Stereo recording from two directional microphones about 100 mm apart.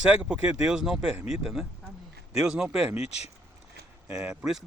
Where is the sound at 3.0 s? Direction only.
90° left.